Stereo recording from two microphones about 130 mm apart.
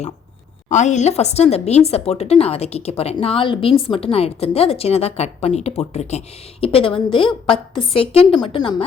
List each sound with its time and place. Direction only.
0.7 s a woman's voice: 65° left (ahead or behind); by 8.8 s 35° left (ahead or behind)